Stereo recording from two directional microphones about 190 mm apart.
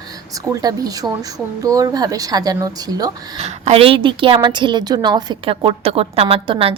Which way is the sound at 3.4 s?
30° right (ahead or behind).